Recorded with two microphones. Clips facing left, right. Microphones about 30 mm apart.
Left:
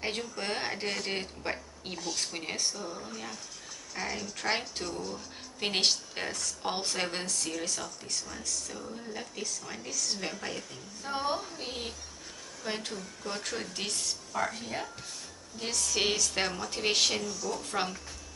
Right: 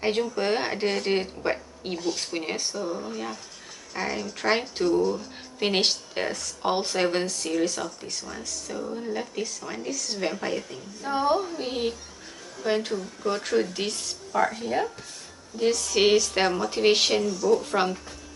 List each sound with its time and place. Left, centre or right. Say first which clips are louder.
0.0 s speech: right 9 dB; centre